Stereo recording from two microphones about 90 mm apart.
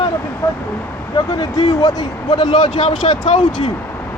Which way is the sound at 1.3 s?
40° left (ahead or behind).